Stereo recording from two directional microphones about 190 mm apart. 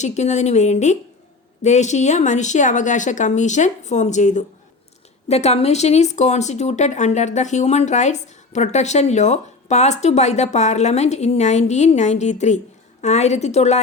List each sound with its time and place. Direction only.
0.0 s speech: 35° left (ahead or behind)